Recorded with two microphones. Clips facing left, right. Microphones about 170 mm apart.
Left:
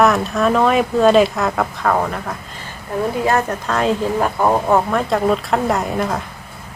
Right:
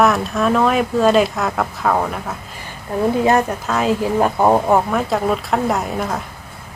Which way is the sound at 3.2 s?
20° right (ahead or behind).